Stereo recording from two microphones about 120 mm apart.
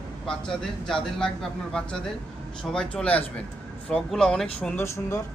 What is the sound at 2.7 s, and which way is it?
Speech, 5° left (ahead or behind).